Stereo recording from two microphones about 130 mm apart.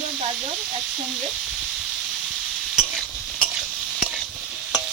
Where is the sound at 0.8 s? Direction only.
Centre (ahead or behind).